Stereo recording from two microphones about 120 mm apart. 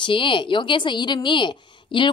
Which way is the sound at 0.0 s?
45° left (ahead or behind).